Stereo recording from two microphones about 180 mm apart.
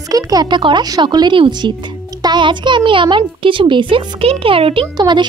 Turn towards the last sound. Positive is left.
turn(degrees=-25)  # may be behind; listen again after turning